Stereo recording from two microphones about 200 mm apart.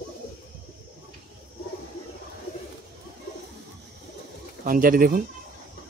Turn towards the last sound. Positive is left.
turn(degrees=-45)  # may be behind; listen again after turning